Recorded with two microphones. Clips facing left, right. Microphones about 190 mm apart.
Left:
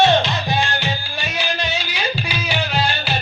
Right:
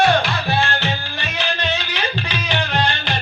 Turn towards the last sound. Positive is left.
turn(degrees=10)  # may be behind; listen again after turning